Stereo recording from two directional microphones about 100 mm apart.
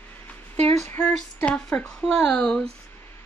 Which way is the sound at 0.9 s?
20° left (ahead or behind).